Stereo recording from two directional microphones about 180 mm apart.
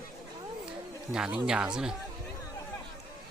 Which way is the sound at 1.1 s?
5° right (ahead or behind).